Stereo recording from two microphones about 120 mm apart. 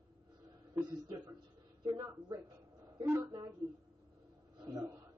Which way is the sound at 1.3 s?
35° right (ahead or behind).